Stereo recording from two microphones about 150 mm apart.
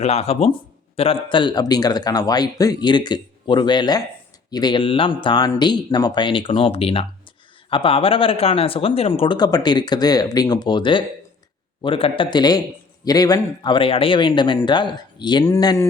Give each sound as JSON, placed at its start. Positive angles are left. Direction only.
{"t": 0.0, "sound": "speech", "side_deg": 45}